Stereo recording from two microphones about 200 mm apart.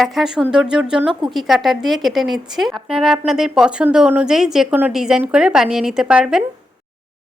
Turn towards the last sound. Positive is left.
turn(degrees=-5)  # may be behind; listen again after turning